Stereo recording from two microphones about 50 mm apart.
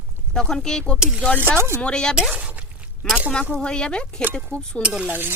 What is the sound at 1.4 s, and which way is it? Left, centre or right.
Speech, right.